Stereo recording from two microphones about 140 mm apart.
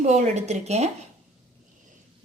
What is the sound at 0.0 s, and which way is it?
Speech, 55° right (ahead or behind).